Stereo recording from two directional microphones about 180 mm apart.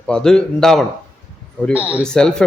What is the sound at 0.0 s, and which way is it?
Speech, 5° left (ahead or behind).